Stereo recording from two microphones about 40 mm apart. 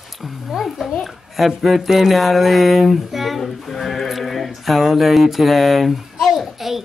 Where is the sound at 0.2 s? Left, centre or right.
Centre.